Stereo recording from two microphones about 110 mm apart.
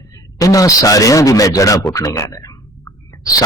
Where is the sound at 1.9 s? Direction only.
30° left (ahead or behind).